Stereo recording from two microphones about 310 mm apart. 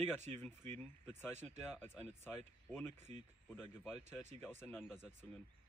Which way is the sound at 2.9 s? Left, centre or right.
Right.